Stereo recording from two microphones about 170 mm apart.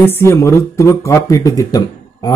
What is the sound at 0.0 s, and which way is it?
Speech, 15° left (ahead or behind).